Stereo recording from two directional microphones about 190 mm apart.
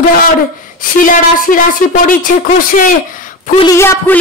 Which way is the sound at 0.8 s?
45° left (ahead or behind).